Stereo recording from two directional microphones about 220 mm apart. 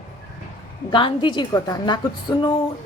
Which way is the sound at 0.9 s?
20° left (ahead or behind).